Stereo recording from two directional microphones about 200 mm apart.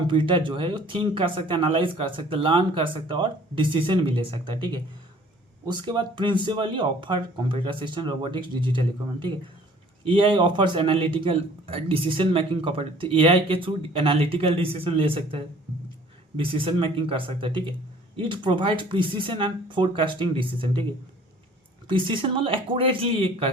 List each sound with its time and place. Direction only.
0.1 s speech: 25° right (ahead or behind)
21.8 s speech: 25° right (ahead or behind)